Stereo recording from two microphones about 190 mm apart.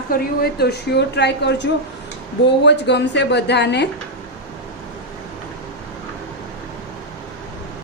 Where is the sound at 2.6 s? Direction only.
65° left (ahead or behind).